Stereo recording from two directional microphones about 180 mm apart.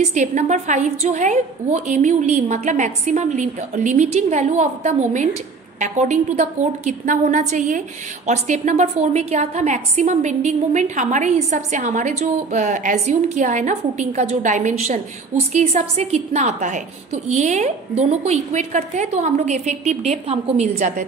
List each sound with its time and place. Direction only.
0.0 s a woman's voice: 40° right (ahead or behind)